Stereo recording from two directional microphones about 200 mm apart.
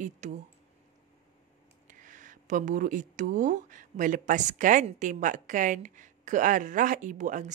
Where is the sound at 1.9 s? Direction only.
40° right (ahead or behind).